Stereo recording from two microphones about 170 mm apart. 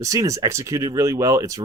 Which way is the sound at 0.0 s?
20° right (ahead or behind).